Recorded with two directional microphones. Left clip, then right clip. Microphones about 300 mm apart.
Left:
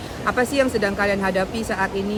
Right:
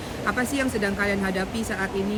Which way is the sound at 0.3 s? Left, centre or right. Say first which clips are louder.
Left 6 dB; centre.